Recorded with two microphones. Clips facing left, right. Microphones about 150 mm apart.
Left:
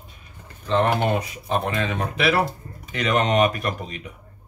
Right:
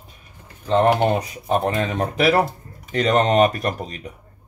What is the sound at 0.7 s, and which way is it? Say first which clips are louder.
Speech: right 4 dB; 40° right (ahead or behind).